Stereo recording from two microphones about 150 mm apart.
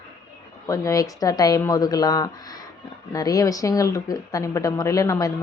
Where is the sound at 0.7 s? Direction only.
20° left (ahead or behind).